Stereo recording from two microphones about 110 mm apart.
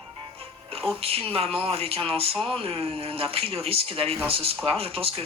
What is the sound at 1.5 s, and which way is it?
Speech, 60° right (ahead or behind).